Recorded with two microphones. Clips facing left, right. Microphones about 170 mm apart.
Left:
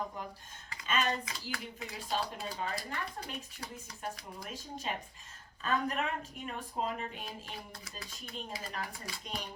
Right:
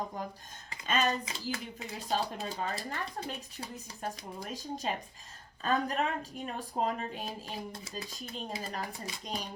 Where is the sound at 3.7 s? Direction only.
35° right (ahead or behind).